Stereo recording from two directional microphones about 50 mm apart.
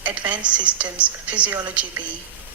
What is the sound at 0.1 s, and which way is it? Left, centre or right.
A woman's voice, right.